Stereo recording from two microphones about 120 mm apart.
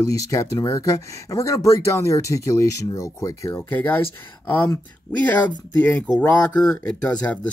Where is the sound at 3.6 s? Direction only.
15° left (ahead or behind).